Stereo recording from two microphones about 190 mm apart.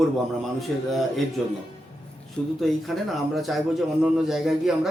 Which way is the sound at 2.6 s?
Centre (ahead or behind).